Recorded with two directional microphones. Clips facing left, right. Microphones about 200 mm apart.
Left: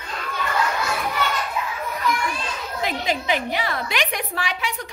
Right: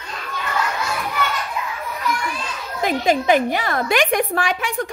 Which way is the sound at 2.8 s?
50° right (ahead or behind).